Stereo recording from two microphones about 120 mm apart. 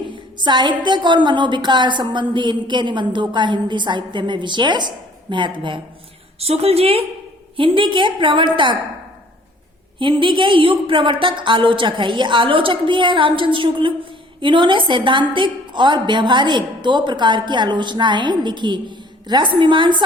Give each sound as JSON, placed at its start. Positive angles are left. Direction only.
{"t": 0.1, "sound": "a woman's voice", "side_deg": -40}
{"t": 6.4, "sound": "a woman's voice", "side_deg": -60}
{"t": 10.0, "sound": "a woman's voice", "side_deg": -45}